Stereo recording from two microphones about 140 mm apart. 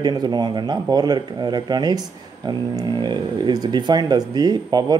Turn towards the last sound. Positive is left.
turn(degrees=-30)  # may be behind; listen again after turning